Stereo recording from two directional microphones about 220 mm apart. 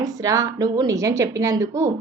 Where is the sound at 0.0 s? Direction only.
15° right (ahead or behind).